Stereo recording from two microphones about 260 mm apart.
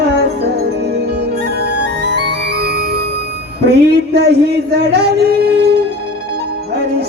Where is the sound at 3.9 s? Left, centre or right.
Right.